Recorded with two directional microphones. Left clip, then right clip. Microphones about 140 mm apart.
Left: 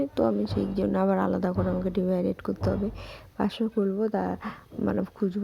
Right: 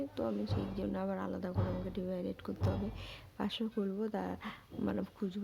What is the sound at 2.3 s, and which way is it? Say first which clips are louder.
Speech: left 11 dB; 35° left (ahead or behind).